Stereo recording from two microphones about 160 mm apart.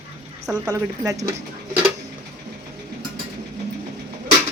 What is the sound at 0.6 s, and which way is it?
Speech, 20° right (ahead or behind).